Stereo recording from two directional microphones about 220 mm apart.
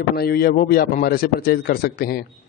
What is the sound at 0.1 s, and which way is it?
Speech, 45° left (ahead or behind).